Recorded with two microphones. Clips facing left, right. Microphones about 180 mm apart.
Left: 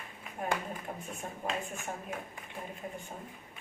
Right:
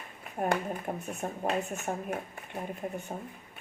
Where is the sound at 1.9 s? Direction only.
45° right (ahead or behind).